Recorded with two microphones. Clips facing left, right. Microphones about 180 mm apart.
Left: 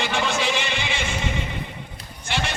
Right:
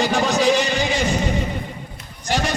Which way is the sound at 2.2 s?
40° right (ahead or behind).